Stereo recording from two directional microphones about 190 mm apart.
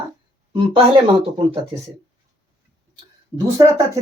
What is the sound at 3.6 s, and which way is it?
Speech, 20° right (ahead or behind).